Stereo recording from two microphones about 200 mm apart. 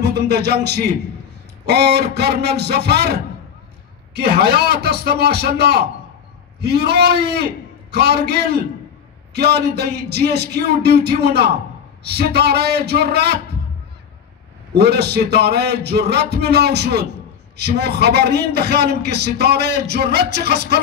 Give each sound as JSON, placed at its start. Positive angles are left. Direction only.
{"t": 0.0, "sound": "a man's voice", "side_deg": -55}
{"t": 14.8, "sound": "a man's voice", "side_deg": -55}